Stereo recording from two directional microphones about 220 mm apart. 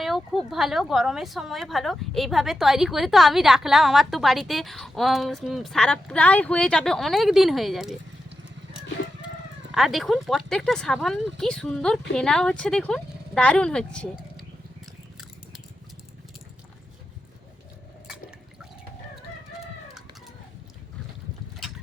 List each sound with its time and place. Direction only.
0.0 s a woman's voice: centre (ahead or behind)
9.7 s a woman's voice: centre (ahead or behind)